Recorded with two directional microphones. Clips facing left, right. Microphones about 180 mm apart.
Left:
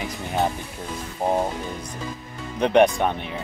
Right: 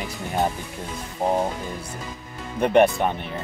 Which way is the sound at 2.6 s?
5° right (ahead or behind).